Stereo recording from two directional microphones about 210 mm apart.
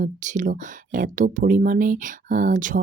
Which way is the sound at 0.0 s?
40° right (ahead or behind).